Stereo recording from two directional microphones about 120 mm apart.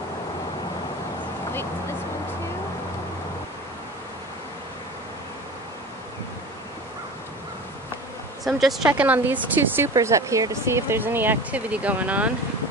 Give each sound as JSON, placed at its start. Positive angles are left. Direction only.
{"t": 8.5, "sound": "speech", "side_deg": 0}
{"t": 9.9, "sound": "speech", "side_deg": -25}